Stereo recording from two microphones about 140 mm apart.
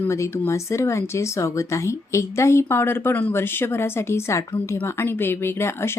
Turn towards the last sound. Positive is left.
turn(degrees=15)  # may be behind; listen again after turning